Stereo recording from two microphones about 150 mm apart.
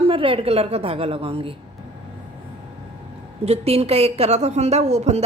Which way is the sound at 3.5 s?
45° right (ahead or behind).